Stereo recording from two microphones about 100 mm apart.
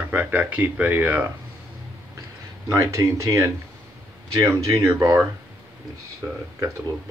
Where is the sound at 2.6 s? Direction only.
30° right (ahead or behind).